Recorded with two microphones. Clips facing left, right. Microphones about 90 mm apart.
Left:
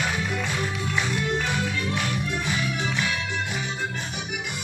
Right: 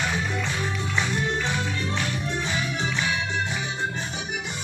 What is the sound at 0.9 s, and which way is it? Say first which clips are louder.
Music: even; 25° right (ahead or behind).